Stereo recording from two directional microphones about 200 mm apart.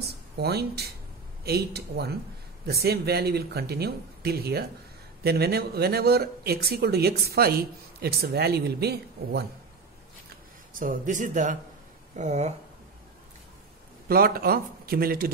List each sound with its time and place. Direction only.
0.1 s speech: 55° right (ahead or behind)
10.7 s speech: 45° right (ahead or behind)
14.0 s speech: 45° right (ahead or behind)